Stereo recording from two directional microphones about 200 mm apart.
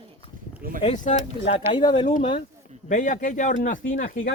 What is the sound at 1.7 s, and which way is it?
Speech, 20° left (ahead or behind).